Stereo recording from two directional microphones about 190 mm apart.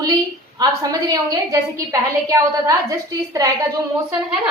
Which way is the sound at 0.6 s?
20° right (ahead or behind).